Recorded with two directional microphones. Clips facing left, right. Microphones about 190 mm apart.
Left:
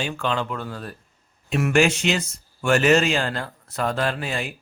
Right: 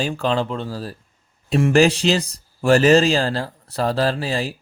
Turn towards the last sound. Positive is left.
turn(degrees=-30)  # may be behind; listen again after turning